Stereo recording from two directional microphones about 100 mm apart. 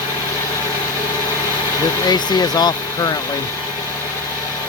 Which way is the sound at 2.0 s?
45° left (ahead or behind).